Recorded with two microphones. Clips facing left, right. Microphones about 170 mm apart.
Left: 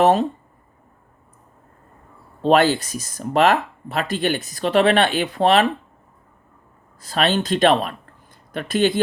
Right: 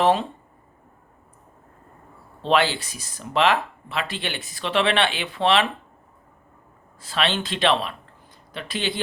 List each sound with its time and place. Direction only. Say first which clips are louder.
0.0 s speech: left 4 dB; 45° left (ahead or behind)
2.4 s speech: left 5 dB; 45° left (ahead or behind)
7.0 s speech: left 5 dB; 45° left (ahead or behind)